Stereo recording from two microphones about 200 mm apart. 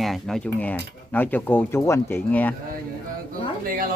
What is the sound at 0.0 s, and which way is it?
Speech, centre (ahead or behind).